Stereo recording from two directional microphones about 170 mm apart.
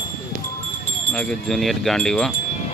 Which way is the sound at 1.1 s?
5° left (ahead or behind).